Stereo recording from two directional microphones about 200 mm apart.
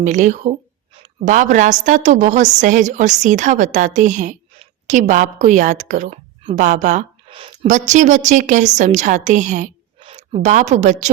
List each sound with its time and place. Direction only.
0.0 s a woman's voice: 40° right (ahead or behind)
7.3 s a woman's voice: 25° right (ahead or behind)